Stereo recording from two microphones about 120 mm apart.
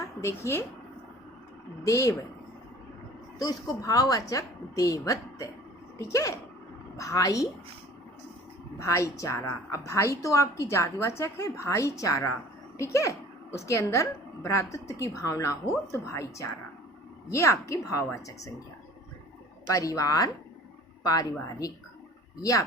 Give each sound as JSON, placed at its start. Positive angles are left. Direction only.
{"t": 0.0, "sound": "speech", "side_deg": 25}
{"t": 1.9, "sound": "a woman's voice", "side_deg": 25}
{"t": 3.3, "sound": "a woman's voice", "side_deg": 30}
{"t": 8.8, "sound": "a woman's voice", "side_deg": 25}
{"t": 19.7, "sound": "a woman's voice", "side_deg": 30}